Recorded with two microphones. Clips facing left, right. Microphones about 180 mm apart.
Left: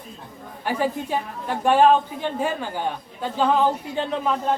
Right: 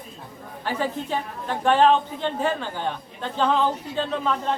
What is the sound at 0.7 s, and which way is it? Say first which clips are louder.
A woman's voice: left 2 dB; 10° left (ahead or behind).